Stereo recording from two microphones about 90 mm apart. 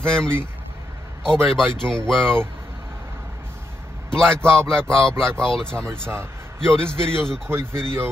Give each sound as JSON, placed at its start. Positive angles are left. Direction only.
{"t": 0.0, "sound": "speech", "side_deg": 10}
{"t": 1.3, "sound": "speech", "side_deg": 5}
{"t": 4.1, "sound": "speech", "side_deg": 10}
{"t": 5.1, "sound": "speech", "side_deg": -30}
{"t": 5.4, "sound": "speech", "side_deg": 10}
{"t": 5.9, "sound": "speech", "side_deg": -30}
{"t": 6.7, "sound": "speech", "side_deg": 10}
{"t": 7.4, "sound": "speech", "side_deg": -25}